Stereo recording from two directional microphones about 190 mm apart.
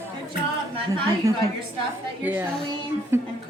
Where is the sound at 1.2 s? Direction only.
15° right (ahead or behind).